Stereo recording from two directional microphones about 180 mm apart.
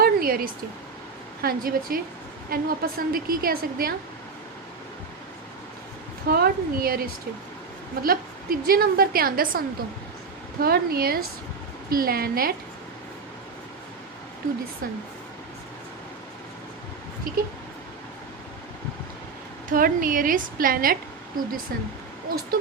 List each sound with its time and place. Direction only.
0.0 s a sound: 55° right (ahead or behind)
1.4 s a woman's voice: 55° right (ahead or behind)
6.2 s a woman's voice: 55° right (ahead or behind)
19.7 s a woman's voice: 50° right (ahead or behind)